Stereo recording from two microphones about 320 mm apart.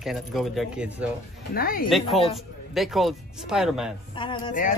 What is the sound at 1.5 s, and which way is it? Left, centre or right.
Speech, left.